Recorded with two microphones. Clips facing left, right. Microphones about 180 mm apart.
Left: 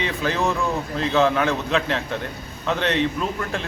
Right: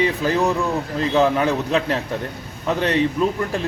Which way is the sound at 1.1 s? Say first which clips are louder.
Right 2 dB; 15° right (ahead or behind).